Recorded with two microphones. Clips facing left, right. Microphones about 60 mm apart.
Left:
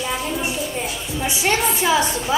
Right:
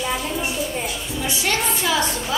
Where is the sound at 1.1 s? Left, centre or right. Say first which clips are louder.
Left 3 dB; left.